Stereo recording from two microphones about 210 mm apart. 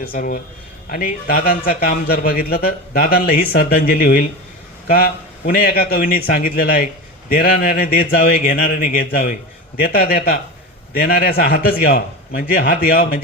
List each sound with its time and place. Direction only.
0.1 s a man's voice: 40° left (ahead or behind)